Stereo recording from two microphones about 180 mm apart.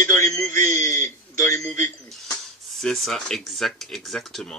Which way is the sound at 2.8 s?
Centre (ahead or behind).